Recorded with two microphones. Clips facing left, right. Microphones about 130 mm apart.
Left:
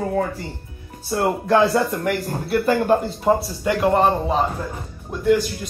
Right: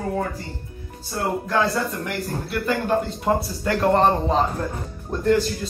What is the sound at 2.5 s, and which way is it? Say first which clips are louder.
Speech: left 7 dB; 45° left (ahead or behind).